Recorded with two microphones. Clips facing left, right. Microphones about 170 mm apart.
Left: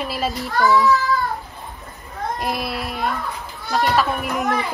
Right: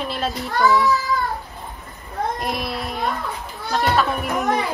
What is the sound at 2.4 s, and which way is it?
Speech, centre (ahead or behind).